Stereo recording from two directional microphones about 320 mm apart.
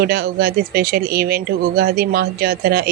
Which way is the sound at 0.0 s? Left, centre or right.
Right.